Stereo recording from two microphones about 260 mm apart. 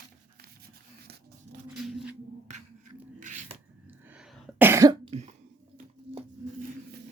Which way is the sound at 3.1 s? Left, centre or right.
Right.